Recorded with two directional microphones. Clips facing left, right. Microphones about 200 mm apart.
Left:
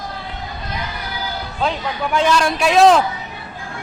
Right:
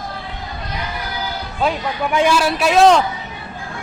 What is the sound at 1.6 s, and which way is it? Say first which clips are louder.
A man's voice: right 2 dB; 10° right (ahead or behind).